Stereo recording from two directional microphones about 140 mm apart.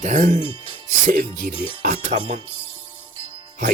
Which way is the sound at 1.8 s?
80° right.